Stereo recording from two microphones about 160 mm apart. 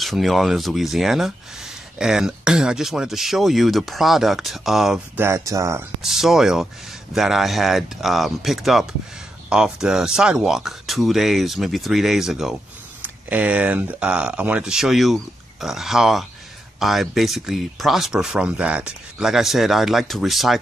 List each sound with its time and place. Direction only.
0.0 s speech: centre (ahead or behind)
5.2 s speech: 20° right (ahead or behind)
6.0 s speech: 5° right (ahead or behind)